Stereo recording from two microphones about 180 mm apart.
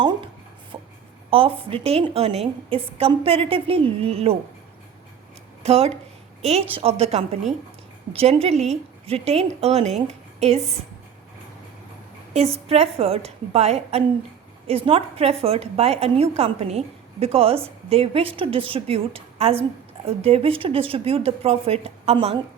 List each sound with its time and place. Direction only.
0.0 s speech: 25° right (ahead or behind)
0.7 s a sound: 25° right (ahead or behind)
1.3 s a woman's voice: 30° right (ahead or behind)
5.6 s a woman's voice: 35° right (ahead or behind)
12.6 s a woman's voice: 35° right (ahead or behind)